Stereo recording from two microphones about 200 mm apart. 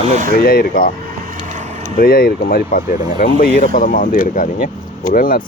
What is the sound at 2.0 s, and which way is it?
Speech, 45° left (ahead or behind).